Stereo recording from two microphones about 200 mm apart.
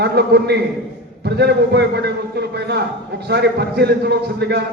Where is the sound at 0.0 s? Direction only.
55° right (ahead or behind).